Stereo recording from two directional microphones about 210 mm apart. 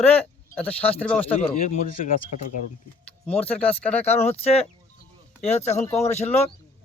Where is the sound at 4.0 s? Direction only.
30° left (ahead or behind).